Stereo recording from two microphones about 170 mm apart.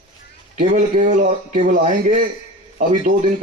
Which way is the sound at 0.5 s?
45° right (ahead or behind).